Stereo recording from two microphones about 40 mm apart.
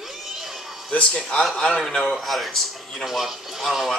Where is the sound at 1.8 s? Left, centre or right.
Centre.